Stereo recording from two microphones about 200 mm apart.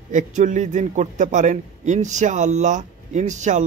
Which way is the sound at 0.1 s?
40° right (ahead or behind).